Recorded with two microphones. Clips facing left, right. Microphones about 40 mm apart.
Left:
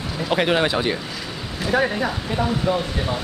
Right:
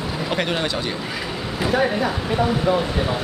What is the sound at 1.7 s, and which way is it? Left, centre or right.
Speech, centre.